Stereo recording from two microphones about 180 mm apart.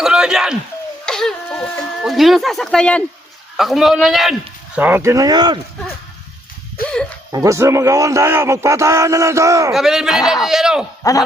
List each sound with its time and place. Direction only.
0.0 s a sound: 5° right (ahead or behind)
3.6 s a man's voice: centre (ahead or behind); by 5.5 s 25° right (ahead or behind)
6.8 s music: 55° left (ahead or behind)
7.3 s a man's voice: 15° right (ahead or behind)
9.7 s speech: 5° right (ahead or behind)
11.0 s speech: 20° left (ahead or behind)